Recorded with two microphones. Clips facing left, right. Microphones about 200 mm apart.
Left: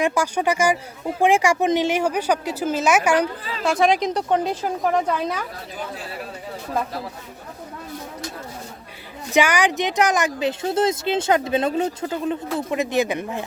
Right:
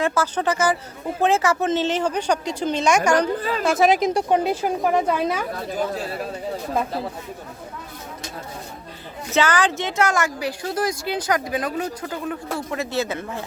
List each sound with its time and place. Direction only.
0.0 s a woman's voice: 15° left (ahead or behind)
3.6 s a woman's voice: 5° right (ahead or behind)
9.3 s a woman's voice: 15° left (ahead or behind)